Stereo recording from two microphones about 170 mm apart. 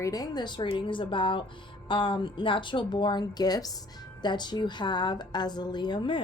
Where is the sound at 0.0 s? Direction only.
20° left (ahead or behind).